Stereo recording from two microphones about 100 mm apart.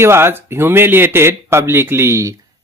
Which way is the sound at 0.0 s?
25° right (ahead or behind).